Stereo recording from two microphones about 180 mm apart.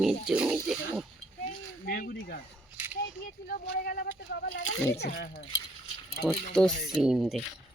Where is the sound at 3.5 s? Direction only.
55° left (ahead or behind).